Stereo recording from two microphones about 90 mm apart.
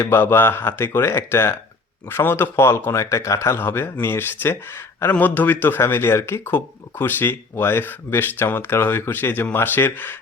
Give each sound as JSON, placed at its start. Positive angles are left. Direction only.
{"t": 0.0, "sound": "speech", "side_deg": 25}